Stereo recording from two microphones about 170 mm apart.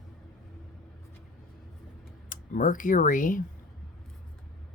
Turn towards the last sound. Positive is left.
turn(degrees=50)  # may be behind; listen again after turning